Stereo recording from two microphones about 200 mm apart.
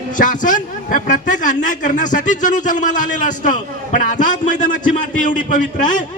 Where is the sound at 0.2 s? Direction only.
40° left (ahead or behind).